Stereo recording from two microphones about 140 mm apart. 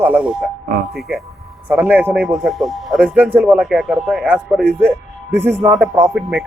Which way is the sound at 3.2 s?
15° right (ahead or behind).